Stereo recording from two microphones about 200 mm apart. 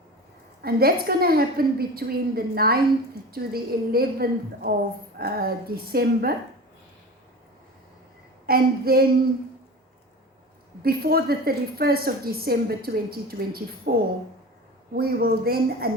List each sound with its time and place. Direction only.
0.6 s a woman's voice: 50° right (ahead or behind)
8.4 s a woman's voice: 50° right (ahead or behind)
10.8 s a woman's voice: 50° right (ahead or behind)
14.9 s a woman's voice: 50° right (ahead or behind)